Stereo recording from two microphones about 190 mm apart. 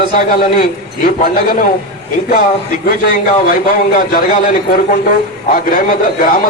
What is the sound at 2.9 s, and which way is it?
A man's voice, 50° left (ahead or behind).